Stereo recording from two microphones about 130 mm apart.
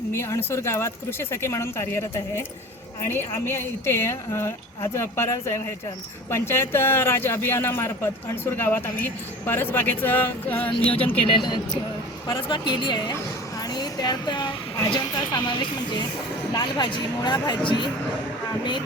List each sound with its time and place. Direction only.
0.1 s a woman's voice: 20° left (ahead or behind)
11.4 s speech: 35° left (ahead or behind)